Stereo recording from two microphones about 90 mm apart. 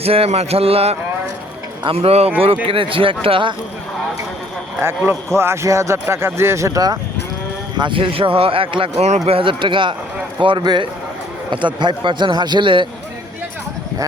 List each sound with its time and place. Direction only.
0.0 s music: 90° right
1.8 s speech: 90° right
4.8 s a man's voice: 25° right (ahead or behind); by 7.0 s 40° right (ahead or behind)
7.8 s speech: 70° right (ahead or behind)
10.4 s a man's voice: 55° right (ahead or behind)